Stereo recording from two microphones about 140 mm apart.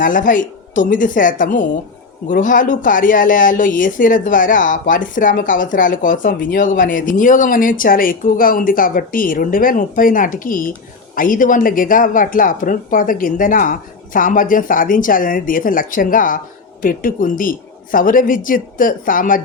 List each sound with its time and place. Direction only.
0.0 s speech: 70° left (ahead or behind)